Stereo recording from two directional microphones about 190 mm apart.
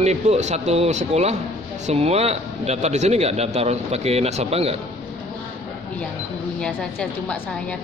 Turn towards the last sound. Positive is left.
turn(degrees=5)  # may be behind; listen again after turning